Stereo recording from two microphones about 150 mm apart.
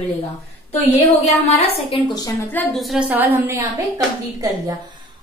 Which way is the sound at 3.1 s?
15° right (ahead or behind).